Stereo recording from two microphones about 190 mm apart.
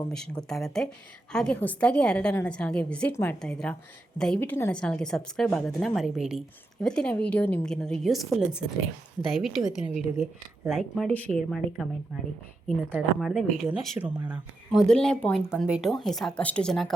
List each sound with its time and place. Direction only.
0.0 s a woman's voice: 5° left (ahead or behind)